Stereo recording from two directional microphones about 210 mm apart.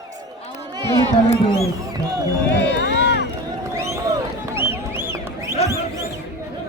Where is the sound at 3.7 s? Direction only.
15° right (ahead or behind).